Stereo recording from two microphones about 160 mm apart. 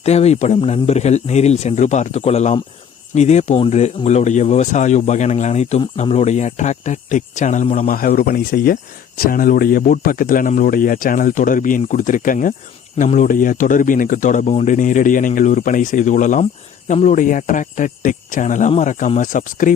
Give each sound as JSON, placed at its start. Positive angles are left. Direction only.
{"t": 0.0, "sound": "speech", "side_deg": 40}